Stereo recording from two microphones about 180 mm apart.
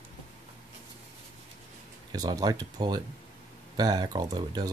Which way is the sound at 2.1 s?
20° right (ahead or behind).